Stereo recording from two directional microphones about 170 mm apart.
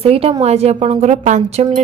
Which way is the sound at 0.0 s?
35° right (ahead or behind).